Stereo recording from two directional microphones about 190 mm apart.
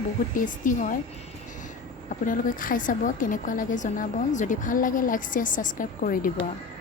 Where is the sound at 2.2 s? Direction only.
45° left (ahead or behind).